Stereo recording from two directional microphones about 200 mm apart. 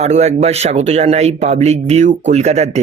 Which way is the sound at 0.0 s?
35° right (ahead or behind).